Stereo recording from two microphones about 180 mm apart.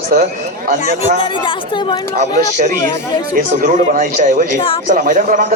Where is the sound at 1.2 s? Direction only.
25° left (ahead or behind).